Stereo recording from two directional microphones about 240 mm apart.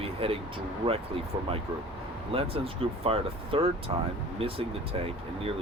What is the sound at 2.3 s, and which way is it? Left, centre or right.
Speech, right.